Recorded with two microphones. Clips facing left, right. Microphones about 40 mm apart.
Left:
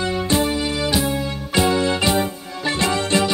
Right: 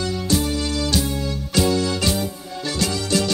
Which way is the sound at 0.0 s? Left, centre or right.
Left.